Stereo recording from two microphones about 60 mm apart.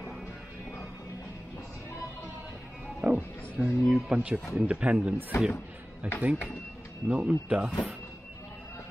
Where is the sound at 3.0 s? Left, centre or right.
Right.